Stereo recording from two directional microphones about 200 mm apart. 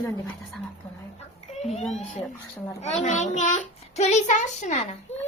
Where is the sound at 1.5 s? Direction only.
30° left (ahead or behind).